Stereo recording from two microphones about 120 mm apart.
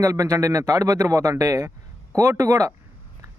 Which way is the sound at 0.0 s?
25° right (ahead or behind).